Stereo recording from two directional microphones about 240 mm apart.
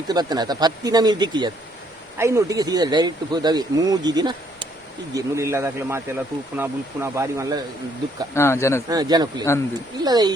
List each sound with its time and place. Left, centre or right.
0.1 s speech: centre
8.4 s speech: centre
8.9 s speech: centre